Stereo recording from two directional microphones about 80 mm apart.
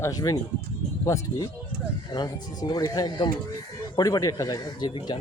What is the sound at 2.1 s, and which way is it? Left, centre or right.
Speech, left.